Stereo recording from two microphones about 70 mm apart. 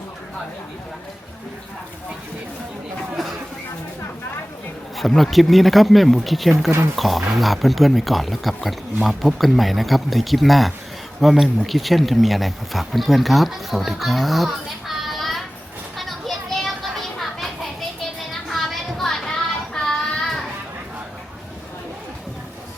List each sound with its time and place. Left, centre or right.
4.9 s speech: centre
16.0 s children playing: centre
18.4 s child singing: centre